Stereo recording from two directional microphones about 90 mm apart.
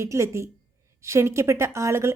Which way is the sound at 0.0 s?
30° right (ahead or behind).